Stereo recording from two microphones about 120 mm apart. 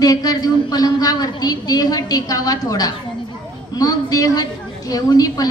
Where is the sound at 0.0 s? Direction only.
30° left (ahead or behind).